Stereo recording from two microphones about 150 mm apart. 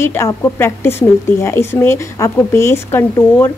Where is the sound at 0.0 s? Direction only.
15° left (ahead or behind).